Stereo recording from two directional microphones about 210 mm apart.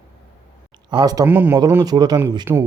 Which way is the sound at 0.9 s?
20° right (ahead or behind).